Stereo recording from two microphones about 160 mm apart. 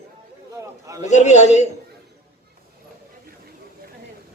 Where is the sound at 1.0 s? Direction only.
45° left (ahead or behind).